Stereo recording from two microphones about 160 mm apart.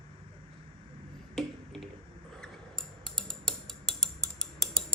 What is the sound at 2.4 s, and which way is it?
Tick-tock, 5° left (ahead or behind).